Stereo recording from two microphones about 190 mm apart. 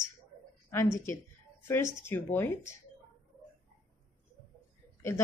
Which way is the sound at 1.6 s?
15° left (ahead or behind).